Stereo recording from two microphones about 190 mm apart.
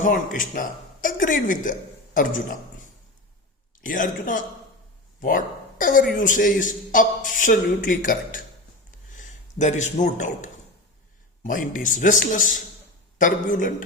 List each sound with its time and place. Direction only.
0.0 s a man's voice: 45° left (ahead or behind)